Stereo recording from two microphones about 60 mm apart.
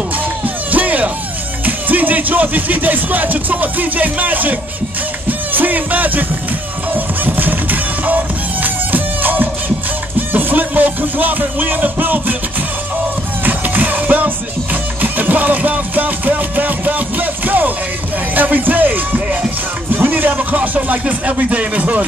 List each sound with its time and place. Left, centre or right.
0.7 s music: right
1.7 s speech: right
6.9 s music: right
13.4 s music: right
19.9 s speech: right